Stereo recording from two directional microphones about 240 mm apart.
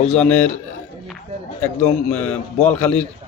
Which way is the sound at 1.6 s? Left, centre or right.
Centre.